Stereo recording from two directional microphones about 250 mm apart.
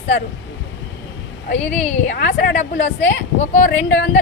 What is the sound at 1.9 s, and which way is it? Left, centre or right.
A woman's voice, left.